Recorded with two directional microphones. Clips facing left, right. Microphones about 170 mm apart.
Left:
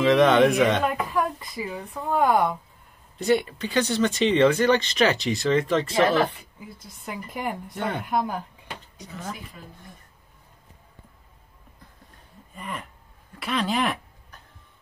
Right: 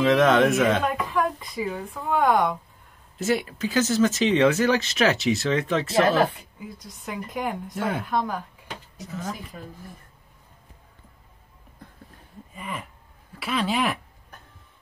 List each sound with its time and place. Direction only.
0.0 s speech: centre (ahead or behind)
12.5 s speech: centre (ahead or behind)